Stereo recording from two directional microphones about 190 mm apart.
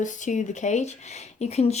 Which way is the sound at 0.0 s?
40° left (ahead or behind).